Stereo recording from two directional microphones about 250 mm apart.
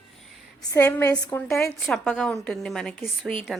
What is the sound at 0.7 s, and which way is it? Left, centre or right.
A woman's voice, centre.